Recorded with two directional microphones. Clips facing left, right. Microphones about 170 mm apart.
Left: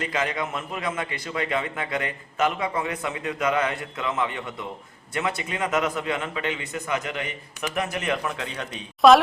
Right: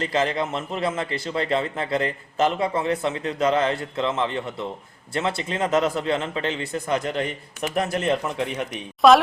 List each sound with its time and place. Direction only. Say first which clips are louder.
0.0 s a man's voice: right 4 dB; 30° right (ahead or behind)
5.5 s a man's voice: right 6 dB; 30° right (ahead or behind)
8.0 s a man's voice: right 4 dB; 20° right (ahead or behind)
9.0 s speech: even; centre (ahead or behind)